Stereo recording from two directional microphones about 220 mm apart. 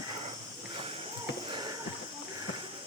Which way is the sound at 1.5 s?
20° right (ahead or behind).